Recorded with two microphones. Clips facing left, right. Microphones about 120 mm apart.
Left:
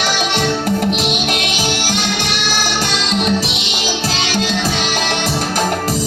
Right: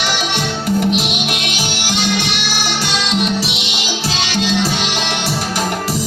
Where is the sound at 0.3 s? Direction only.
50° left (ahead or behind).